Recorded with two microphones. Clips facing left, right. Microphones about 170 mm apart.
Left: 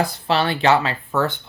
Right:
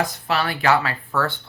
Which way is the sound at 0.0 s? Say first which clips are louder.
Left 3 dB; 30° left (ahead or behind).